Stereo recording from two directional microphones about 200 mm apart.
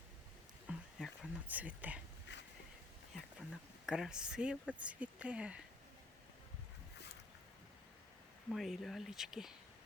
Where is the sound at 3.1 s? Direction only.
Centre (ahead or behind).